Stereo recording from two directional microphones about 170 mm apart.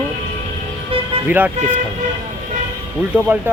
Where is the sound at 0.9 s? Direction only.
35° right (ahead or behind).